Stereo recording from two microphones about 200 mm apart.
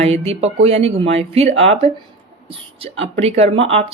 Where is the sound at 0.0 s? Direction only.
30° right (ahead or behind).